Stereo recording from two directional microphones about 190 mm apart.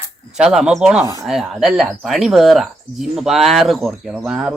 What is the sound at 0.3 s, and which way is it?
Speech, 5° right (ahead or behind).